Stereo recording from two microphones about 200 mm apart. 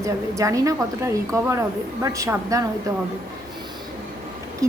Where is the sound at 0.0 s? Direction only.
15° right (ahead or behind).